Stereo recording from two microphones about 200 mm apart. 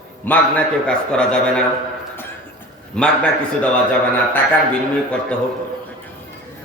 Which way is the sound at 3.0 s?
5° left (ahead or behind).